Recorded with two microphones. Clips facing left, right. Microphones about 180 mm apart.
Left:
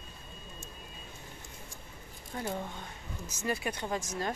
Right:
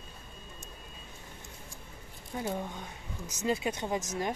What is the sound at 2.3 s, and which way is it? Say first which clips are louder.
Speech: right 2 dB; 10° right (ahead or behind).